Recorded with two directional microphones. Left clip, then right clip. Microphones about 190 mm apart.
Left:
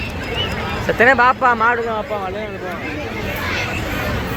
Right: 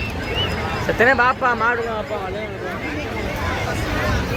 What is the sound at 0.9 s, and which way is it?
Speech, 20° left (ahead or behind).